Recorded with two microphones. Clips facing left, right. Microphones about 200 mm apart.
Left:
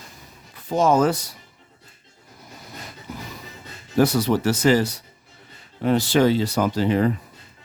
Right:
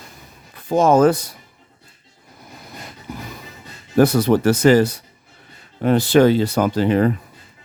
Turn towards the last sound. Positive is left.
turn(degrees=-60)  # may be behind; listen again after turning